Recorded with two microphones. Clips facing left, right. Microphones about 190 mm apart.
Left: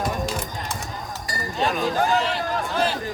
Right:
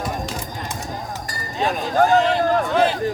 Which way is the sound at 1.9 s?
45° right (ahead or behind).